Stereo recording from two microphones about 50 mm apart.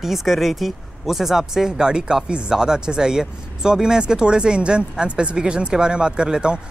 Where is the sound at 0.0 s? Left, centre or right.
Centre.